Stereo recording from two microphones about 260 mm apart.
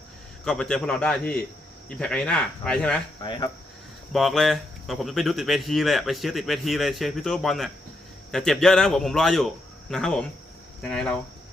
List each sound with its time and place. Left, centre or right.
0.4 s speech: centre
3.2 s speech: centre
4.1 s speech: centre